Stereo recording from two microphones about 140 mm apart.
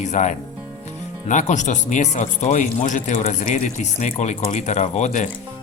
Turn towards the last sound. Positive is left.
turn(degrees=55)  # may be behind; listen again after turning